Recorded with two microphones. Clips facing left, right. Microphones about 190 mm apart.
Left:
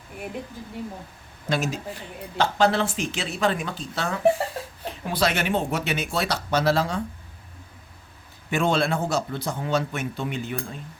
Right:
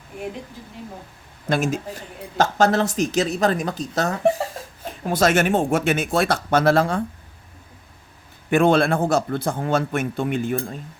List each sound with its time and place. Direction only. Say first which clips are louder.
1.5 s a man's voice: right 4 dB; 50° right (ahead or behind)
8.4 s a man's voice: right 6 dB; 55° right (ahead or behind)